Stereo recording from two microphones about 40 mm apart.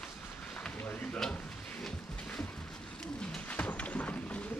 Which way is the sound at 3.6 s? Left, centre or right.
Left.